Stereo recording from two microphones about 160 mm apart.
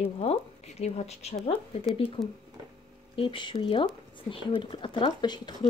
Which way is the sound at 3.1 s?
35° left (ahead or behind).